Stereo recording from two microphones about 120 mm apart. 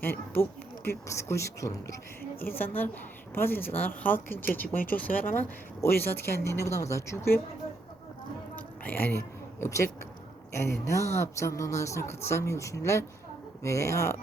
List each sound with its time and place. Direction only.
0.0 s a woman's voice: 20° left (ahead or behind)
8.5 s a sound: 15° left (ahead or behind)
10.5 s speech: 25° left (ahead or behind)